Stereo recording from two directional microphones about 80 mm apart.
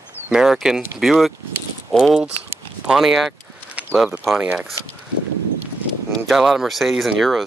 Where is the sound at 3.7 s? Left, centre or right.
Centre.